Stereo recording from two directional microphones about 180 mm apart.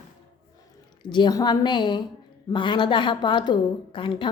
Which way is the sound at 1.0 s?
25° left (ahead or behind).